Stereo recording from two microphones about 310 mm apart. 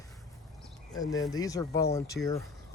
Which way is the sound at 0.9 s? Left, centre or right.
Centre.